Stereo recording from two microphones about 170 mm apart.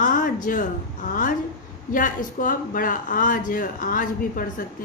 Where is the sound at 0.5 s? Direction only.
55° left (ahead or behind).